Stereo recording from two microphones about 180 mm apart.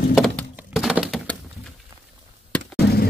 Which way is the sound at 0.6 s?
5° right (ahead or behind).